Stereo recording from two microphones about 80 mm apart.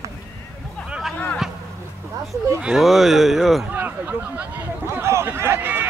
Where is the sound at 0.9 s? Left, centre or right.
Centre.